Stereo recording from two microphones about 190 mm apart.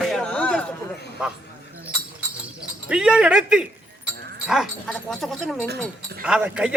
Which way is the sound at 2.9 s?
5° right (ahead or behind).